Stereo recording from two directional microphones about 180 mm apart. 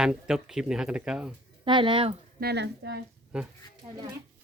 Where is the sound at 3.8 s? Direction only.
35° right (ahead or behind).